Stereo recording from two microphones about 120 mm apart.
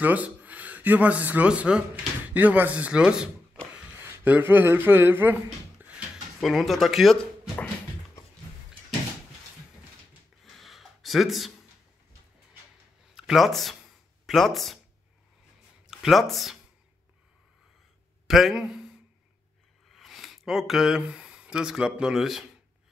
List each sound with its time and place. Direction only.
0.0 s speech: 15° right (ahead or behind)
3.7 s a sound: 15° right (ahead or behind)
6.4 s speech: centre (ahead or behind)
10.4 s a sound: centre (ahead or behind)
13.1 s speech: centre (ahead or behind)
15.9 s speech: centre (ahead or behind)
18.2 s speech: centre (ahead or behind)
19.9 s speech: centre (ahead or behind)